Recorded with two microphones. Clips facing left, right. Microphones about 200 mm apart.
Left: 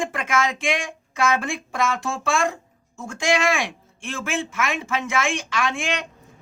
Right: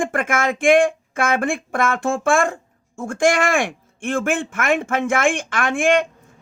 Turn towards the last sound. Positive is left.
turn(degrees=-50)  # may be behind; listen again after turning